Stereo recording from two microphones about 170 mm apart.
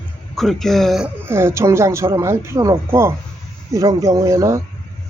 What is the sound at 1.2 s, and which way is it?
Speech, 15° right (ahead or behind).